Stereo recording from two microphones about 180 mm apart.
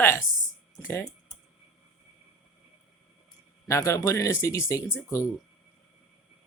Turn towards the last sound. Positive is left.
turn(degrees=15)  # may be behind; listen again after turning